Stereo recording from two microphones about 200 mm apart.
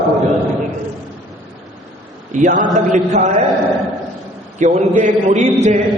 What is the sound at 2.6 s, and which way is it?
Speech, 35° right (ahead or behind).